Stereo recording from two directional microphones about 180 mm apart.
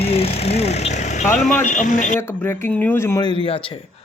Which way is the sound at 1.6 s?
45° left (ahead or behind).